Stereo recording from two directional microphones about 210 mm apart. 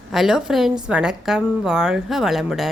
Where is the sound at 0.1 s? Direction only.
Centre (ahead or behind).